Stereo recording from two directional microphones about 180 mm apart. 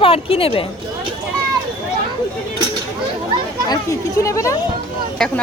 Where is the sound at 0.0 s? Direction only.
30° left (ahead or behind).